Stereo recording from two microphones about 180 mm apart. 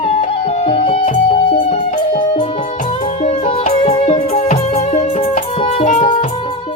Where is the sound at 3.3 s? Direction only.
35° left (ahead or behind).